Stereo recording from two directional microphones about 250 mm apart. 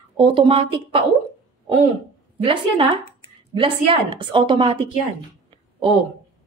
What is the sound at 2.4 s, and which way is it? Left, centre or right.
A woman's voice, right.